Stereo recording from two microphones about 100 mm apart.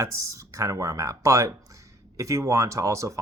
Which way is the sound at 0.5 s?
30° right (ahead or behind).